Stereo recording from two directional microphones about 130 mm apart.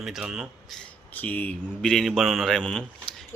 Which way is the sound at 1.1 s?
15° left (ahead or behind).